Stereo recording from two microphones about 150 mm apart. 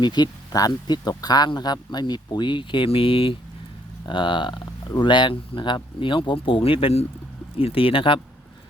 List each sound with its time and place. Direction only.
0.0 s speech: 30° left (ahead or behind)